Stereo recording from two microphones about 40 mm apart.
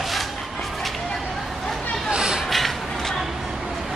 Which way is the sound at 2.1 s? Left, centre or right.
Centre.